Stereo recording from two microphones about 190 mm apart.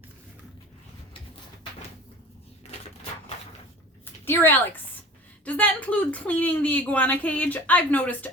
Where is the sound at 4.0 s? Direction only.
10° left (ahead or behind).